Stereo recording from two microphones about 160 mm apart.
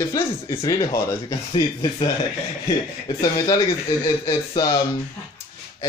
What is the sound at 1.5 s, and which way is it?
Speech, 35° left (ahead or behind).